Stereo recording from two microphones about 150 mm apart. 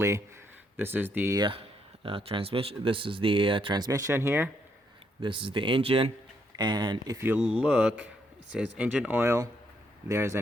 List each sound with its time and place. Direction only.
0.8 s speech: 15° right (ahead or behind)
1.4 s speech: 35° right (ahead or behind); by 4.5 s 15° right (ahead or behind)
5.2 s speech: 35° right (ahead or behind)
7.2 s speech: 10° right (ahead or behind)